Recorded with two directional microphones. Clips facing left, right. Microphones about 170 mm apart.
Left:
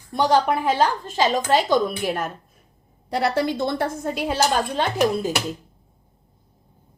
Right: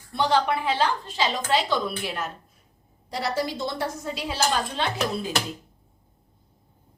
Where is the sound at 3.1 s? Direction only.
60° left (ahead or behind).